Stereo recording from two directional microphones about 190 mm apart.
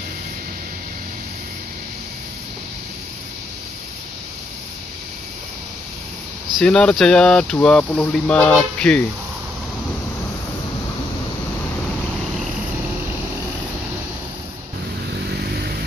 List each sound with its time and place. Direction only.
6.6 s speech: 5° left (ahead or behind)
15.3 s vehicle: 55° right (ahead or behind)